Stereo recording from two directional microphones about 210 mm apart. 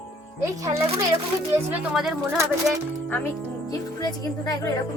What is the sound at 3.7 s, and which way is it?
Speech, 15° left (ahead or behind).